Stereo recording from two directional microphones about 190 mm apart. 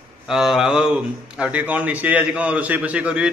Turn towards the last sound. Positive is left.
turn(degrees=-5)  # may be behind; listen again after turning